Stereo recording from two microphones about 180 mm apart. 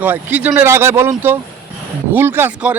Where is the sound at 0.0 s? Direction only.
10° right (ahead or behind).